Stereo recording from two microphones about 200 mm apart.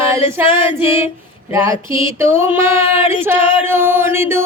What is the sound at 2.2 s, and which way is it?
Music, 10° right (ahead or behind).